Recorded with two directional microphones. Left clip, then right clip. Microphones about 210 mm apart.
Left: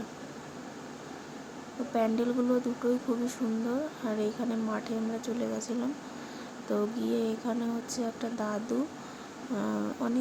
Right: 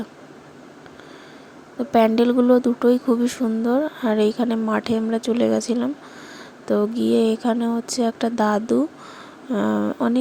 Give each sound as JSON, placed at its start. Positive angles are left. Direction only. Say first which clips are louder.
{"t": 1.9, "sound": "speech", "louder": "right 13 dB", "side_deg": -45}